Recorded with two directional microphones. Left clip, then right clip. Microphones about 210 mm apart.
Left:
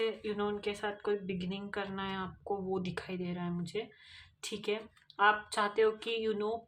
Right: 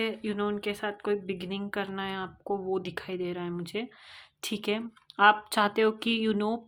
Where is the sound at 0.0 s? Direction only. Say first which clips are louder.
Right 3 dB; 40° right (ahead or behind).